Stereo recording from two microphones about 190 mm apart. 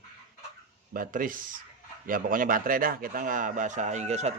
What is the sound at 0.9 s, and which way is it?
A man's voice, 45° right (ahead or behind).